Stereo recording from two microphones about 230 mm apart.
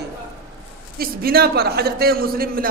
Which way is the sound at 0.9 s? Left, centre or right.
Right.